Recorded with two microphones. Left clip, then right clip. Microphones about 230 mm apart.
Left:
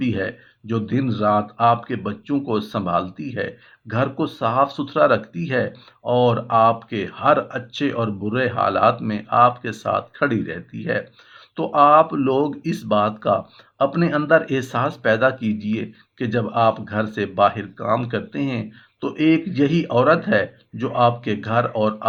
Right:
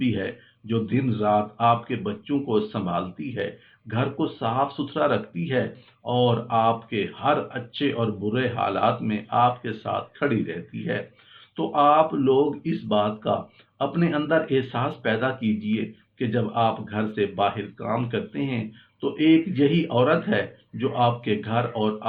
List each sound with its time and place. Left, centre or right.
0.0 s speech: left